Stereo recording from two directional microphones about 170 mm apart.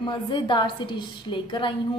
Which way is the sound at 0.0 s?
30° left (ahead or behind).